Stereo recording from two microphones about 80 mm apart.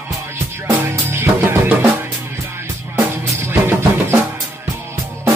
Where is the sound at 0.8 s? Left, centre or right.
Right.